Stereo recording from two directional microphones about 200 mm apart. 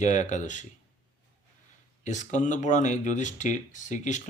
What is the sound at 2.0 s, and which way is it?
Speech, 40° left (ahead or behind).